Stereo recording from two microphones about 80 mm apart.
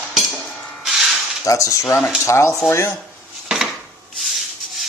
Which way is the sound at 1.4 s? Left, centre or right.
Left.